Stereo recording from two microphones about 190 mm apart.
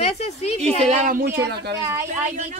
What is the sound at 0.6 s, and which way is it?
A woman's voice, 40° right (ahead or behind).